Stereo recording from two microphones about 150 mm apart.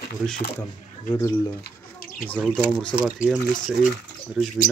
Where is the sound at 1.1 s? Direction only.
20° left (ahead or behind).